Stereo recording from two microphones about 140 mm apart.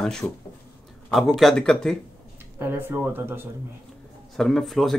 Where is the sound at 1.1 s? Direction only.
Centre (ahead or behind).